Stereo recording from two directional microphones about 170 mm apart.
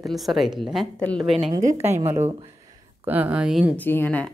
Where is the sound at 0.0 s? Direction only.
Centre (ahead or behind).